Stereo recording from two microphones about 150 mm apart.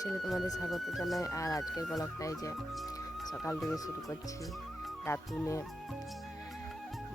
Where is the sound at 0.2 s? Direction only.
Centre (ahead or behind).